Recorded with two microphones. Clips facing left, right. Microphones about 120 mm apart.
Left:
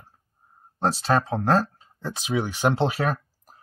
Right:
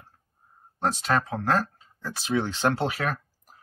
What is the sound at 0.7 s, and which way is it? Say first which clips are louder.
Speech: left 3 dB; 30° left (ahead or behind).